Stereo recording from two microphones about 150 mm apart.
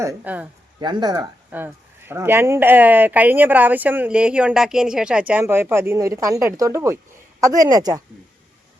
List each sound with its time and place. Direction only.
0.0 s speech: 15° right (ahead or behind)
0.8 s a woman's voice: 30° right (ahead or behind)
1.5 s a woman's voice: 15° right (ahead or behind)